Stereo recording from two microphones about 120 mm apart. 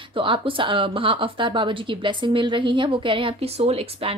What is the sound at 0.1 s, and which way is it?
A woman's voice, 45° right (ahead or behind).